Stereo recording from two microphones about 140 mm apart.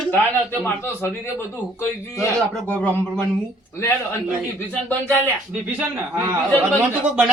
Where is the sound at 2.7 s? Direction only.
10° left (ahead or behind).